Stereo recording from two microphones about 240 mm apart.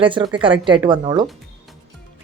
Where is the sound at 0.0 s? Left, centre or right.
Right.